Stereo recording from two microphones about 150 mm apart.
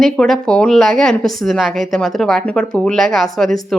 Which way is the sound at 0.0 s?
5° left (ahead or behind).